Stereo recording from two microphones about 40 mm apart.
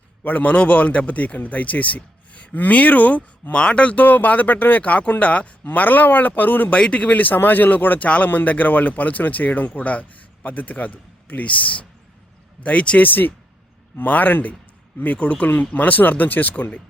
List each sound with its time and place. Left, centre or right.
0.3 s speech: left
3.5 s speech: left
3.9 s speech: left
5.6 s speech: left
6.7 s speech: left
7.0 s speech: left
8.3 s speech: left
13.0 s speech: left